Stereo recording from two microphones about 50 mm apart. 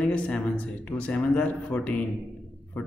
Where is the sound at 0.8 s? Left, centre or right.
Left.